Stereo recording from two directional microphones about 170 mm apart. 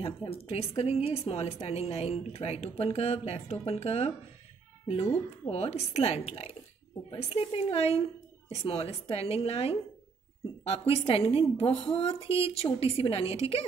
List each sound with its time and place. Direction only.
0.0 s a woman's voice: 35° left (ahead or behind)